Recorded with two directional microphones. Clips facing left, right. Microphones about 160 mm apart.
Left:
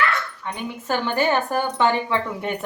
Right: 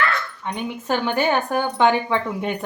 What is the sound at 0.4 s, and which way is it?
Speech, 20° right (ahead or behind).